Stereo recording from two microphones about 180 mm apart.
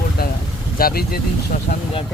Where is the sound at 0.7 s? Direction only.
55° left (ahead or behind).